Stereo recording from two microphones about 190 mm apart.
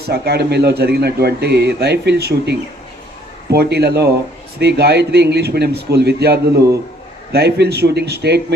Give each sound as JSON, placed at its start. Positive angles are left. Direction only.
{"t": 0.1, "sound": "a man's voice", "side_deg": -60}